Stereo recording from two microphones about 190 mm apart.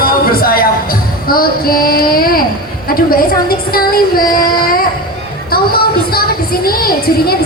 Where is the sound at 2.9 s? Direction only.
50° left (ahead or behind).